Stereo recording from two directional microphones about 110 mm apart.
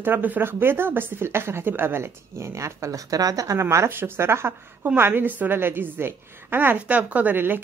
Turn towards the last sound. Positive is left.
turn(degrees=-20)  # may be behind; listen again after turning